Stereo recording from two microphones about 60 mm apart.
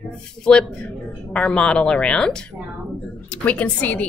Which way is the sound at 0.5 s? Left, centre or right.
Centre.